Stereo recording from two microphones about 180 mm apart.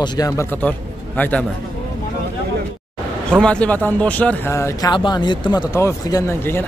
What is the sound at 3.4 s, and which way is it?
Speech, 5° left (ahead or behind).